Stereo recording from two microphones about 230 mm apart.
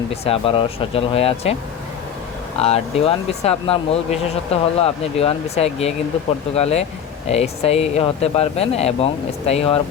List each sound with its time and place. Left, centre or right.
0.1 s speech: left
2.6 s speech: left